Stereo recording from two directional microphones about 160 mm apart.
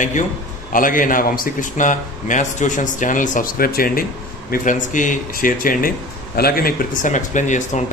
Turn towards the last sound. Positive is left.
turn(degrees=50)  # may be behind; listen again after turning